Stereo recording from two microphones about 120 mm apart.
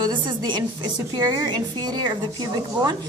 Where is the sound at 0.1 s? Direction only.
40° right (ahead or behind).